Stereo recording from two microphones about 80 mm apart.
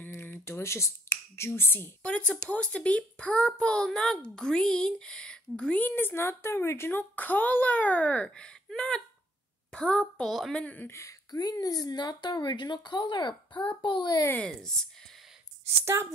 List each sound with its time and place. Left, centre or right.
0.0 s finger snapping: left
2.0 s a child's voice: centre
10.5 s a child's voice: centre
10.9 s a child's voice: left
14.4 s a child's voice: centre
15.8 s speech: right